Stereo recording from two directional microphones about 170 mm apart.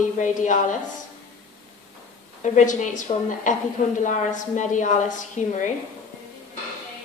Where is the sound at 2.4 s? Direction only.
45° left (ahead or behind).